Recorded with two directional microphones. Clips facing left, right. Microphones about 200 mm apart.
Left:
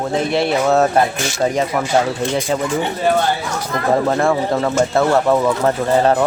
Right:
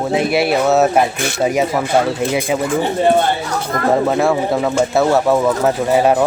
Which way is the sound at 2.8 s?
25° right (ahead or behind).